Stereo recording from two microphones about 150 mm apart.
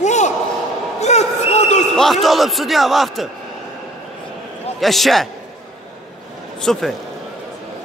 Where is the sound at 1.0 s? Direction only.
50° left (ahead or behind).